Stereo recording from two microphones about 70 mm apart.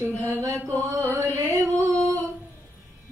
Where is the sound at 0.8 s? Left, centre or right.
Right.